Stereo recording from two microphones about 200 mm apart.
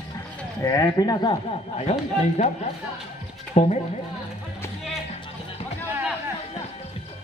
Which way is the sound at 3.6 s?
35° left (ahead or behind).